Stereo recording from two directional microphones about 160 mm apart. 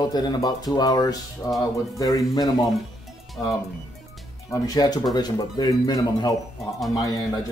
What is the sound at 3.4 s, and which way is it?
Speech, 5° left (ahead or behind).